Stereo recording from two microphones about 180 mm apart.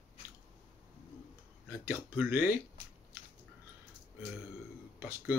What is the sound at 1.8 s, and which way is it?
Speech, 10° right (ahead or behind).